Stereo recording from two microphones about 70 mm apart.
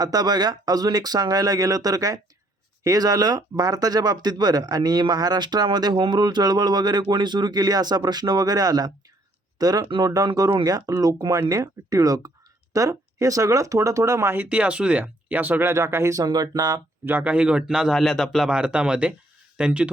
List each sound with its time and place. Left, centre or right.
0.0 s speech: right
14.3 s speech: centre
15.6 s speech: right
16.2 s speech: right
17.1 s a man's voice: right
17.9 s a man's voice: centre
18.4 s a man's voice: centre